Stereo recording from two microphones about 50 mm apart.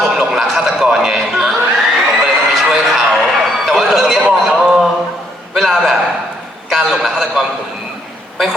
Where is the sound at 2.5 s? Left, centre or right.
Centre.